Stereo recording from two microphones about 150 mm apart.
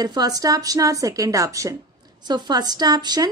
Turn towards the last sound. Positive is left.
turn(degrees=-25)  # may be behind; listen again after turning